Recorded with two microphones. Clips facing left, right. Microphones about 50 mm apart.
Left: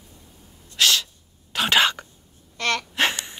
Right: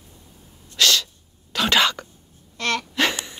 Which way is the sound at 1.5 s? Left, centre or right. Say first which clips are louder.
Even; left.